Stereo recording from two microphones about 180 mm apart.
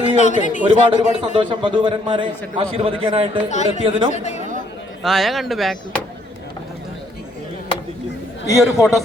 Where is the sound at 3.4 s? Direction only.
40° left (ahead or behind).